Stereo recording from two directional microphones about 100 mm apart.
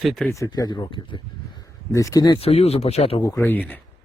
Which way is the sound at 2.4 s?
85° left.